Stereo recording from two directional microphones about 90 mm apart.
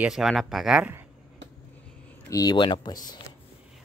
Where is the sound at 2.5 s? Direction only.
60° left (ahead or behind).